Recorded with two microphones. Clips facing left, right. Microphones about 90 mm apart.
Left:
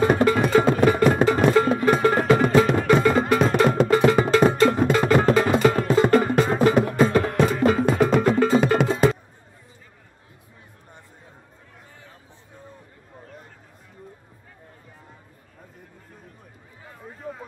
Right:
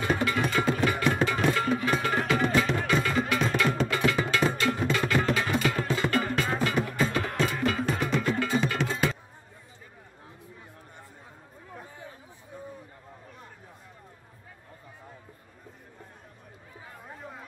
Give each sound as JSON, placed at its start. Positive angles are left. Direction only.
{"t": 0.0, "sound": "music", "side_deg": 40}